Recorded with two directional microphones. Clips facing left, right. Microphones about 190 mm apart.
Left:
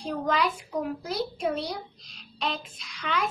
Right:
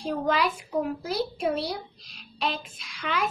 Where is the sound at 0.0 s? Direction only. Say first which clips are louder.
Right 1 dB; 10° right (ahead or behind).